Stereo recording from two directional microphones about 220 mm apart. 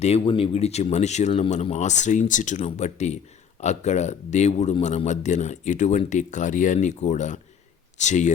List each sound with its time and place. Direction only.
0.0 s a man's voice: 25° left (ahead or behind)